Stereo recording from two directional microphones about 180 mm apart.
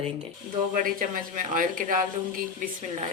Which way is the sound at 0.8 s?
50° right (ahead or behind).